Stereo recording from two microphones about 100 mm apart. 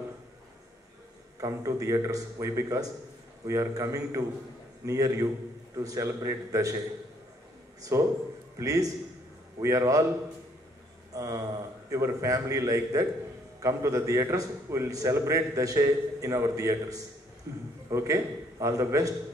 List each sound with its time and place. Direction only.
1.4 s a man's voice: 30° right (ahead or behind)
7.8 s a man's voice: 35° right (ahead or behind)
11.1 s a sound: 35° right (ahead or behind)
11.9 s a man's voice: 30° right (ahead or behind)